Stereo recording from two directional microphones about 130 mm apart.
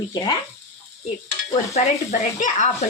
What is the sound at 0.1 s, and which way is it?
Speech, 35° left (ahead or behind).